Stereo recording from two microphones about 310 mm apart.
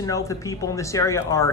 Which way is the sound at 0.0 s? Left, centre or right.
Centre.